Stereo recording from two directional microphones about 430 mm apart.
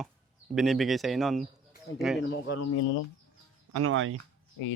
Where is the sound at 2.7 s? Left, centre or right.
Left.